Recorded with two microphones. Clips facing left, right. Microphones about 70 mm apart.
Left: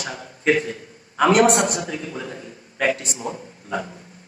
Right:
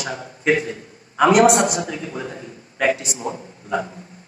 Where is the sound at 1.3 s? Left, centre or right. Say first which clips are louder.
Right 3 dB; right.